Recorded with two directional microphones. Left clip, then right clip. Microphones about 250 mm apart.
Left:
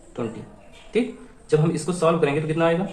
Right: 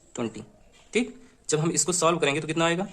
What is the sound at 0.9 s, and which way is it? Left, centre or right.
A man's voice, right.